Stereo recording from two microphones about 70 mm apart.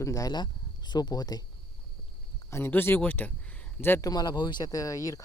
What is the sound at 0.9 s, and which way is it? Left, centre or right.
Speech, left.